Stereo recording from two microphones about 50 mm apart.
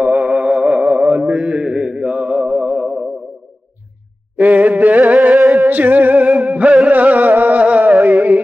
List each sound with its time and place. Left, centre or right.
0.0 s music: right
0.9 s mantra: right
1.3 s mantra: right
4.4 s a sound: right
5.7 s music: right